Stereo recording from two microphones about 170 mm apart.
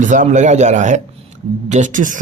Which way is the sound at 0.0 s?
50° right (ahead or behind).